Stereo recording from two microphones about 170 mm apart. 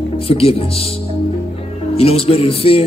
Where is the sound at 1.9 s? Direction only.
35° left (ahead or behind).